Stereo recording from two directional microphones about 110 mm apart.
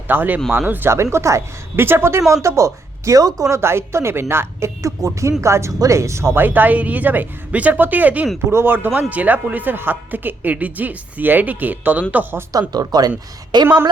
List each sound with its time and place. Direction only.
0.1 s speech: 15° right (ahead or behind); by 3.4 s 35° right (ahead or behind)
3.5 s speech: 25° right (ahead or behind)
12.5 s speech: 35° right (ahead or behind)